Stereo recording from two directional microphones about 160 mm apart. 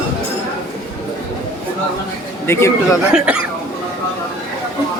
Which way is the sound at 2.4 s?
15° left (ahead or behind).